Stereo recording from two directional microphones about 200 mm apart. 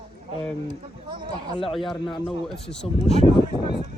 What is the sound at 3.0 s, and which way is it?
Speech, 30° left (ahead or behind).